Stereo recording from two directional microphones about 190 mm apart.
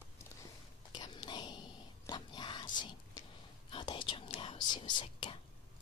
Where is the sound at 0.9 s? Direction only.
20° left (ahead or behind).